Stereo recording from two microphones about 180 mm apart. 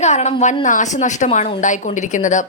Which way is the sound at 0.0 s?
40° left (ahead or behind).